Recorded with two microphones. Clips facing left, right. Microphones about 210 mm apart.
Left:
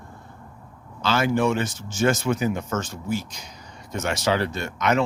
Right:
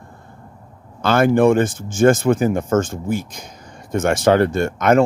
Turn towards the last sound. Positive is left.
turn(degrees=-50)  # may be behind; listen again after turning